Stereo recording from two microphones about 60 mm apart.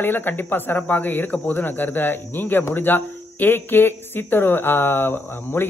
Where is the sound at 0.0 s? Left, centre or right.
Left.